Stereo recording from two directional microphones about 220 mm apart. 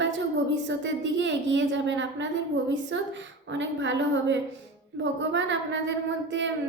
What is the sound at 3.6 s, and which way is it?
A woman's voice, 55° right (ahead or behind).